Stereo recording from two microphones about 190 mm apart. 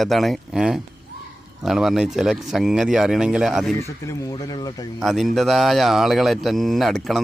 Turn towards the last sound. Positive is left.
turn(degrees=0)  # may be behind; listen again after turning